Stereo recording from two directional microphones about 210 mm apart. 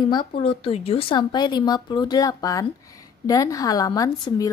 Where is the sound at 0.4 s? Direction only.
25° left (ahead or behind).